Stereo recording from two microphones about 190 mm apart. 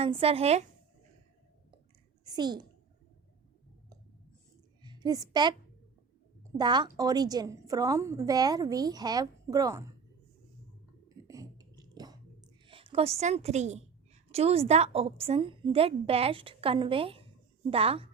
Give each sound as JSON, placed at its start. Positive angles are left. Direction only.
{"t": 0.0, "sound": "speech", "side_deg": -30}
{"t": 2.2, "sound": "a child's voice", "side_deg": -20}
{"t": 4.8, "sound": "a sound", "side_deg": -20}
{"t": 6.6, "sound": "a woman's voice", "side_deg": -25}
{"t": 11.3, "sound": "music", "side_deg": -20}
{"t": 12.6, "sound": "a woman's voice", "side_deg": -30}